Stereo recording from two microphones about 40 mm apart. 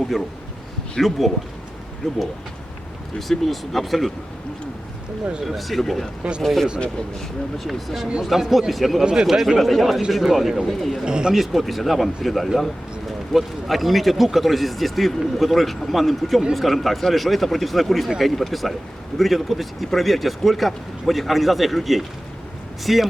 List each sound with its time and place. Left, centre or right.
0.1 s a man's voice: centre
5.5 s a man's voice: centre
9.6 s a man's voice: centre
10.7 s a man's voice: centre
11.0 s speech: right
11.3 s a man's voice: centre